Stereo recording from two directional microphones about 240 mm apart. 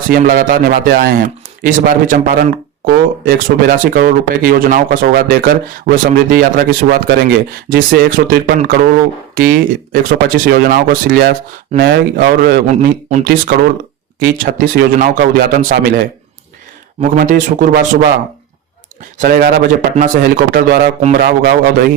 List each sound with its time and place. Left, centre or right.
0.1 s speech: right
19.2 s speech: right